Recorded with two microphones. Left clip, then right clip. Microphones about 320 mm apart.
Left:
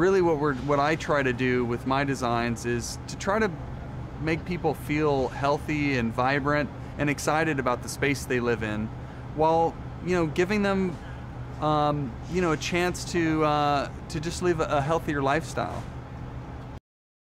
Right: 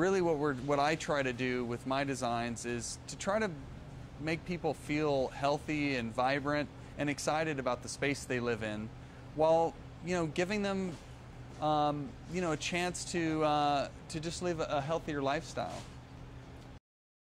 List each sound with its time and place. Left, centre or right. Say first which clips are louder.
0.0 s speech: left 8 dB; right